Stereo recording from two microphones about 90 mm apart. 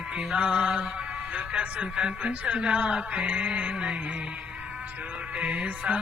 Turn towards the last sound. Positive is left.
turn(degrees=-15)  # may be behind; listen again after turning